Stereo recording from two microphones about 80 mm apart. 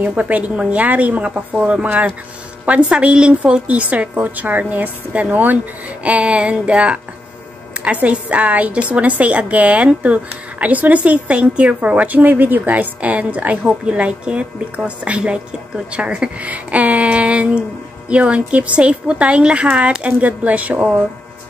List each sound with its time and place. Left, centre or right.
0.0 s a woman's voice: centre